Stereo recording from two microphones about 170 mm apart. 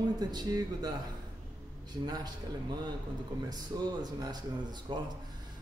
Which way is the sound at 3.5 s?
25° right (ahead or behind).